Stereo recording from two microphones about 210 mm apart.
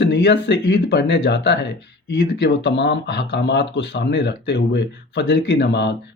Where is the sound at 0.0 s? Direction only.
55° left (ahead or behind).